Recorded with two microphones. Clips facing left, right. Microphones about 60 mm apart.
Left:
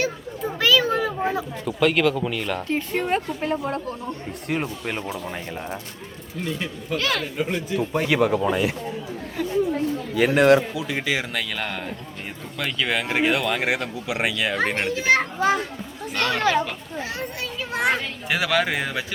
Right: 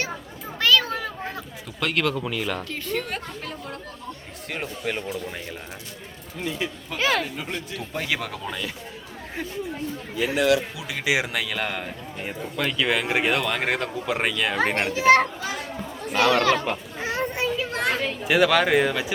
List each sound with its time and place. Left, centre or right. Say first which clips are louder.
0.0 s children playing: left 6 dB; centre
2.6 s a woman's voice: left 6 dB; left
4.4 s speech: left 3 dB; centre
6.4 s speech: even; centre
7.3 s a man's voice: left 8 dB; centre
10.2 s a man's voice: left 5 dB; left
11.0 s speech: right 1 dB; centre
15.4 s a child's voice: left 10 dB; left
16.0 s speech: right 4 dB; centre
16.4 s a woman's voice: left 1 dB; left
17.0 s children playing: right 4 dB; right
17.5 s a sound: right 1 dB; centre
18.0 s speech: right 5 dB; centre